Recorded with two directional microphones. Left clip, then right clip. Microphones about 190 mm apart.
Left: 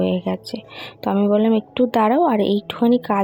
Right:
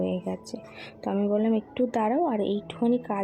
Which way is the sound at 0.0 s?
25° left (ahead or behind).